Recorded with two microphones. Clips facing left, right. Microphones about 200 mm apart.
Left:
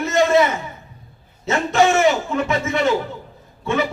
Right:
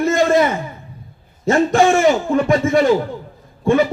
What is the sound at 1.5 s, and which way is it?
Speech, 50° right (ahead or behind).